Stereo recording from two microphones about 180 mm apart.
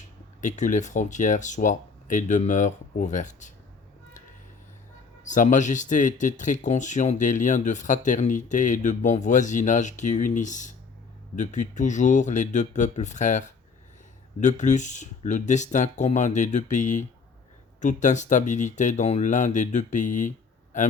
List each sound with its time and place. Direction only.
0.4 s speech: 45° left (ahead or behind)
5.2 s speech: 45° left (ahead or behind)
14.4 s speech: 40° left (ahead or behind)